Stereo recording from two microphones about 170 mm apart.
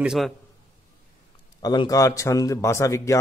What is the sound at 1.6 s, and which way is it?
A man's voice, 25° left (ahead or behind).